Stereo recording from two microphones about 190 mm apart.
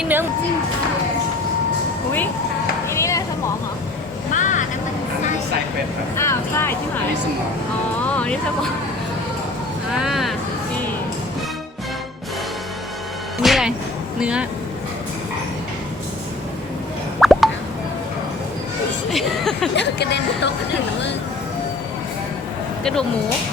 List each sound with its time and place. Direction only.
0.0 s speech: 10° right (ahead or behind)
2.9 s a sound: 15° left (ahead or behind)
4.3 s vehicle: 40° left (ahead or behind)
6.1 s speech: 15° left (ahead or behind)
8.0 s speech: 5° left (ahead or behind)
9.9 s speech: centre (ahead or behind)
13.4 s music: centre (ahead or behind)
14.2 s speech: 5° right (ahead or behind)
17.2 s plop: centre (ahead or behind)
19.1 s a sound: centre (ahead or behind)
19.7 s speech: 65° left (ahead or behind)
22.8 s speech: 5° left (ahead or behind)